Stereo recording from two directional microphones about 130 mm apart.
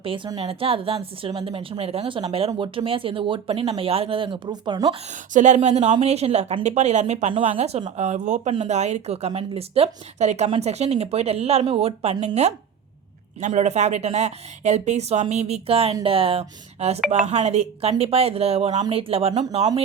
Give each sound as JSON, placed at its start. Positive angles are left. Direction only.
{"t": 0.3, "sound": "speech", "side_deg": -45}
{"t": 5.3, "sound": "speech", "side_deg": -70}